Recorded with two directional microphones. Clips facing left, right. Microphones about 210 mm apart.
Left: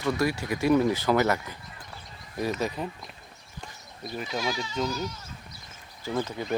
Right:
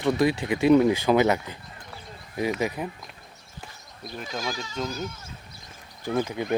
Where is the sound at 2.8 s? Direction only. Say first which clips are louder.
Right 1 dB; 10° right (ahead or behind).